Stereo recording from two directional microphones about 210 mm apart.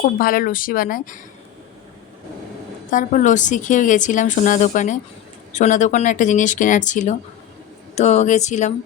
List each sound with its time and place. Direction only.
0.0 s speech: 40° left (ahead or behind)
2.9 s speech: 40° left (ahead or behind)